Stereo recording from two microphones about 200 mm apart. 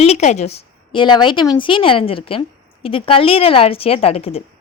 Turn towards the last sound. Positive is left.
turn(degrees=30)  # may be behind; listen again after turning